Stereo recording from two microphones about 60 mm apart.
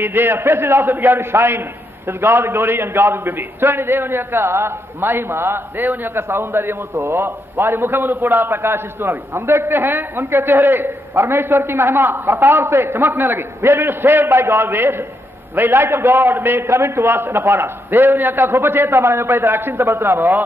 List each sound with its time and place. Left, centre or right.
0.0 s a man's voice: right